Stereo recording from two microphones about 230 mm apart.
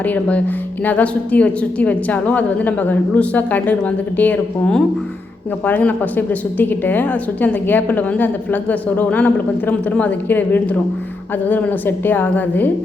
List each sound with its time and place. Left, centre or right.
0.0 s a woman's voice: centre